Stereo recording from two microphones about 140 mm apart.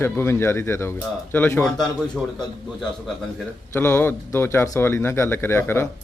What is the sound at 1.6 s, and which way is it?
Speech, 5° left (ahead or behind).